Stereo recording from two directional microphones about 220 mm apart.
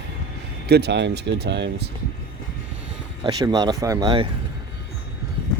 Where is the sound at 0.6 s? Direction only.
50° right (ahead or behind).